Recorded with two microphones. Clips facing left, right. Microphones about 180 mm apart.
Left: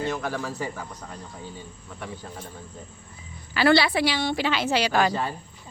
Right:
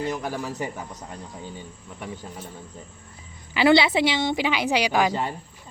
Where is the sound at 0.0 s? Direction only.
15° right (ahead or behind).